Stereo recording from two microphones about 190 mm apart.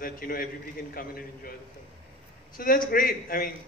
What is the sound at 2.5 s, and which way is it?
Speech, 50° left (ahead or behind).